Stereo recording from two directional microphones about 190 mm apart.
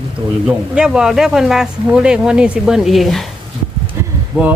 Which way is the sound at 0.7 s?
5° right (ahead or behind).